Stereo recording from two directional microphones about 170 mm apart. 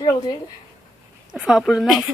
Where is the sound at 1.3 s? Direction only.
5° right (ahead or behind).